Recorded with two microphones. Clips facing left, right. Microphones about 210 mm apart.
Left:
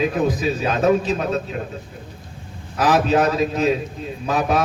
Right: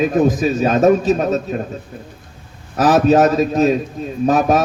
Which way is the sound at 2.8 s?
45° right (ahead or behind).